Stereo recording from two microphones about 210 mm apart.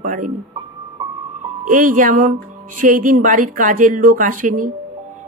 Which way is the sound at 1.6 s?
40° right (ahead or behind).